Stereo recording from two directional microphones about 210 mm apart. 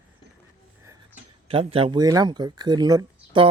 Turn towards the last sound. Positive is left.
turn(degrees=-20)  # may be behind; listen again after turning